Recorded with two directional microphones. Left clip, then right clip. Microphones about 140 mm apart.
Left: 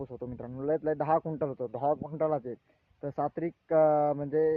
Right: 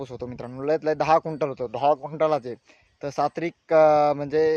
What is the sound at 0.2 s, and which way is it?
Speech, 30° right (ahead or behind).